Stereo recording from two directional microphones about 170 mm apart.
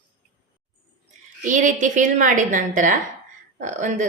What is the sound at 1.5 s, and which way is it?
A woman's voice, 50° right (ahead or behind).